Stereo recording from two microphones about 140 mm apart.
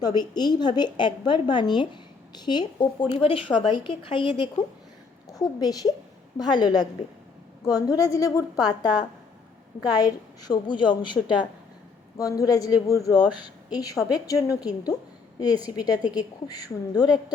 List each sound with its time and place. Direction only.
0.0 s a woman's voice: 30° left (ahead or behind)
5.3 s a woman's voice: 25° left (ahead or behind)